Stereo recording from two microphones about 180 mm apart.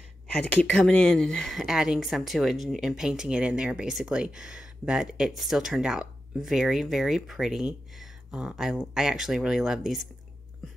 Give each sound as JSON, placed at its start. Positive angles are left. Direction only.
{"t": 0.3, "sound": "speech", "side_deg": 10}